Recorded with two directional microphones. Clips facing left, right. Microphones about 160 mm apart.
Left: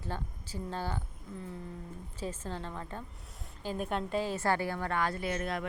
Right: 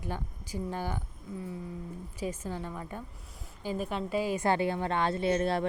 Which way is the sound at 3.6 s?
Centre (ahead or behind).